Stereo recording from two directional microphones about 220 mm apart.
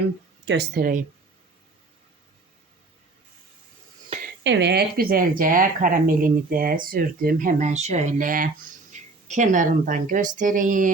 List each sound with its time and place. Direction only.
0.4 s speech: 50° right (ahead or behind)
4.1 s a sound: 25° right (ahead or behind)
4.4 s speech: 50° right (ahead or behind); by 10.9 s 35° right (ahead or behind)